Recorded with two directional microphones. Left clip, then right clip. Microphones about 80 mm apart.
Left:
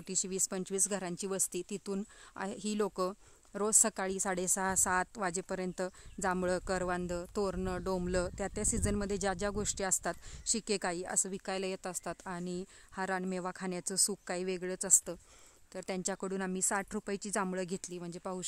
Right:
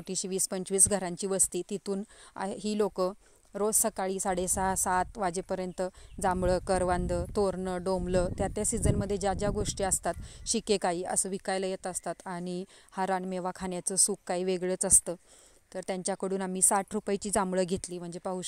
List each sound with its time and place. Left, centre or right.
0.0 s a woman's voice: right
6.4 s a woman's voice: right
8.0 s speech: right
10.4 s a woman's voice: right
12.4 s a woman's voice: right
13.3 s speech: right
14.4 s a woman's voice: right
15.7 s a woman's voice: right